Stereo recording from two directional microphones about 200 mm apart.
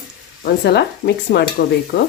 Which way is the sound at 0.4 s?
55° left (ahead or behind).